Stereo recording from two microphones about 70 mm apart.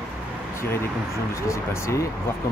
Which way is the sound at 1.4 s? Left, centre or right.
Left.